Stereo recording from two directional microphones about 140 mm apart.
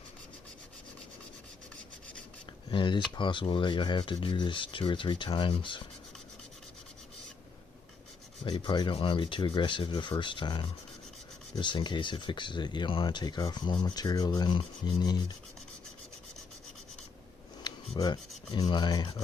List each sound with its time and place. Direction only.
2.6 s speech: 35° left (ahead or behind)
8.4 s speech: 35° left (ahead or behind)
17.6 s a sound: 30° left (ahead or behind)
18.6 s speech: 35° left (ahead or behind)